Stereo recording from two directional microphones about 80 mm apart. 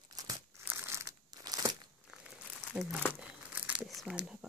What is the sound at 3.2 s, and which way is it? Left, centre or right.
Crumpling, centre.